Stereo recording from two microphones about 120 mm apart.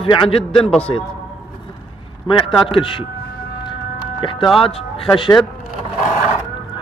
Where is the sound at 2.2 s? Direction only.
45° left (ahead or behind).